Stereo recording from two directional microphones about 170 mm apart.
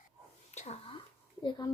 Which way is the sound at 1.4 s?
25° left (ahead or behind).